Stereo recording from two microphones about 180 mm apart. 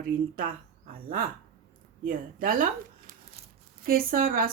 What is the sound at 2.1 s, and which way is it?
Speech, 50° right (ahead or behind).